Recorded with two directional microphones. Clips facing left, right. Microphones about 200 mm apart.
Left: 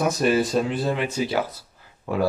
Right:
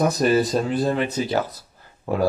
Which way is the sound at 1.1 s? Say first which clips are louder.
Right 1 dB; 10° left (ahead or behind).